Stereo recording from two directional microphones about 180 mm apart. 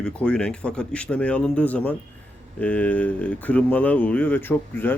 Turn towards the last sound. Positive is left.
turn(degrees=10)  # may be behind; listen again after turning